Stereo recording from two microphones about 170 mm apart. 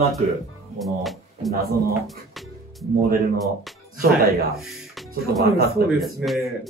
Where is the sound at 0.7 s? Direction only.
Centre (ahead or behind).